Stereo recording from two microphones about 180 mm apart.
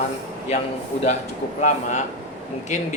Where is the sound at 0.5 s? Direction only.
35° left (ahead or behind).